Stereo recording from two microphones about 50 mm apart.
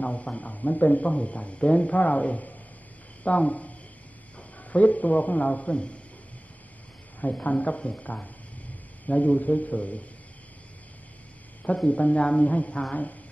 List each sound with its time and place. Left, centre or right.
0.0 s a man's voice: left
7.2 s speech: left
11.6 s speech: left